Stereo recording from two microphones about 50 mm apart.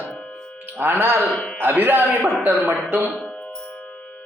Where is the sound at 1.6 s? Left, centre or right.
Right.